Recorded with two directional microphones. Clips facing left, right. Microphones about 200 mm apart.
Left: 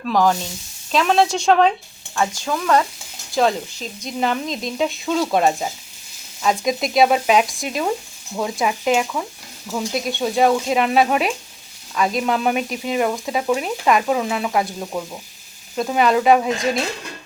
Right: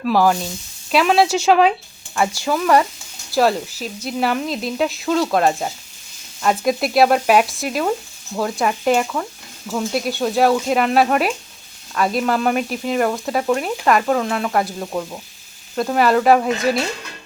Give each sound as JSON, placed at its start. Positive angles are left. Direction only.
{"t": 0.0, "sound": "sizzle", "side_deg": -5}
{"t": 0.9, "sound": "speech", "side_deg": -5}